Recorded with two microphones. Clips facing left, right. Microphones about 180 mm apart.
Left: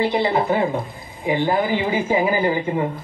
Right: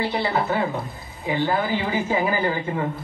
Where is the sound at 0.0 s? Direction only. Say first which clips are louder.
Left 4 dB; 20° left (ahead or behind).